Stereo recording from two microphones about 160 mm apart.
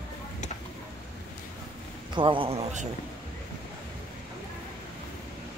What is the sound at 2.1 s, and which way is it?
Speech, 30° right (ahead or behind).